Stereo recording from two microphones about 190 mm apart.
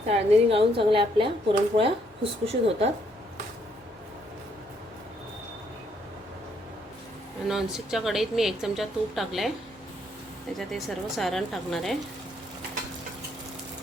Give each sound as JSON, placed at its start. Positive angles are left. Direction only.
{"t": 0.1, "sound": "a woman's voice", "side_deg": -30}
{"t": 7.4, "sound": "a woman's voice", "side_deg": -5}
{"t": 10.6, "sound": "a woman's voice", "side_deg": 0}